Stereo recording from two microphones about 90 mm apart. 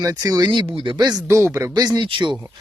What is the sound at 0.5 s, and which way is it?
Speech, 70° right (ahead or behind).